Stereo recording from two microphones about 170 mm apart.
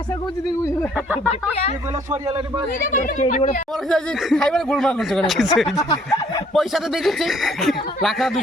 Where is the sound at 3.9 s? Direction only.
Centre (ahead or behind).